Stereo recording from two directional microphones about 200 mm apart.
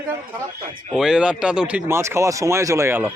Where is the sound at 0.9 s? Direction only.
5° right (ahead or behind).